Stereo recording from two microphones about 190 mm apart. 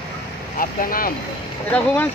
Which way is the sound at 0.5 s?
50° left (ahead or behind).